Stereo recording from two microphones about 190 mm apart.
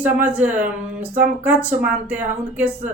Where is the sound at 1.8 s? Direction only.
5° right (ahead or behind).